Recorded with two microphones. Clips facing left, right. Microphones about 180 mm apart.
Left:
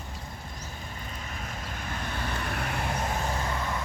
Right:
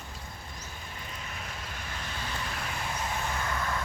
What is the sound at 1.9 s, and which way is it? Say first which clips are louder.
Vehicle: left 5 dB; 55° left (ahead or behind).